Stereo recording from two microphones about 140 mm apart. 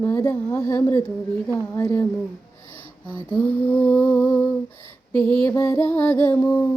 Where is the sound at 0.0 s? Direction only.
15° left (ahead or behind).